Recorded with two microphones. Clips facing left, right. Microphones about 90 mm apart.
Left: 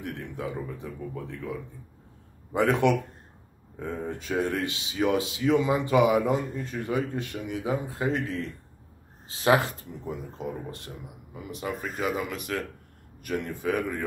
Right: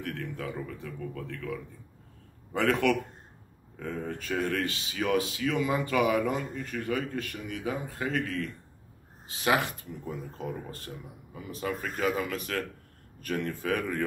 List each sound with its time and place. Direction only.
0.0 s speech: 20° left (ahead or behind)
10.0 s speech: 15° left (ahead or behind)
11.8 s speech: 5° left (ahead or behind)
12.2 s speech: 15° left (ahead or behind)